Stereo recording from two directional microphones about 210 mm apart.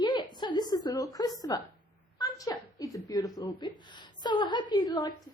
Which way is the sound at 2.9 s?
15° left (ahead or behind).